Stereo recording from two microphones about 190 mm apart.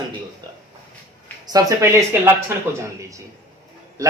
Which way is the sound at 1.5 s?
15° right (ahead or behind).